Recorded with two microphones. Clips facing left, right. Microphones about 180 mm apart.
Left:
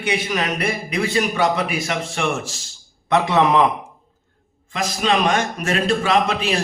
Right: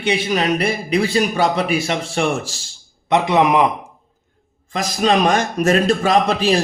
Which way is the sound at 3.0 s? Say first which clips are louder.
Right 2 dB; 20° right (ahead or behind).